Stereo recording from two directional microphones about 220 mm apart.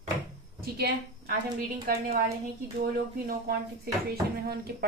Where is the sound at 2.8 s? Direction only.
45° right (ahead or behind).